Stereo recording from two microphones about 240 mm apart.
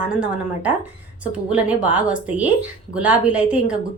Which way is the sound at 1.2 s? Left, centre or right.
Centre.